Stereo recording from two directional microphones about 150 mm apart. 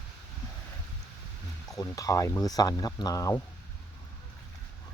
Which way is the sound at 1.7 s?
25° left (ahead or behind).